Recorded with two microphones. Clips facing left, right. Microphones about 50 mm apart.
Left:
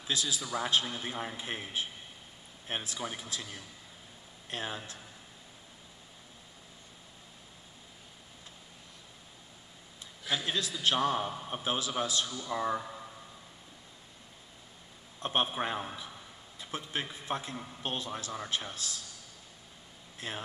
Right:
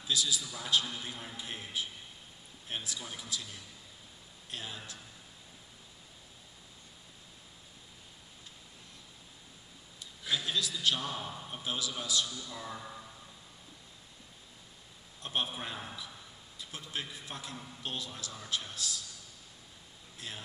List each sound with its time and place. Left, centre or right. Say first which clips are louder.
0.0 s a man's voice: even; left
10.3 s a man's voice: left 1 dB; left
15.1 s a man's voice: left 5 dB; left
20.2 s speech: left 5 dB; left